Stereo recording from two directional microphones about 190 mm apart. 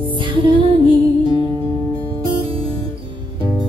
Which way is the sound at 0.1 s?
25° right (ahead or behind).